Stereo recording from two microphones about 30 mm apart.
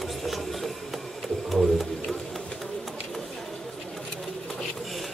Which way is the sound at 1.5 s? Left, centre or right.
Centre.